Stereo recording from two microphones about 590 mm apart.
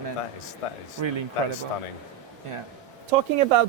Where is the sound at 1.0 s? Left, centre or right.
Right.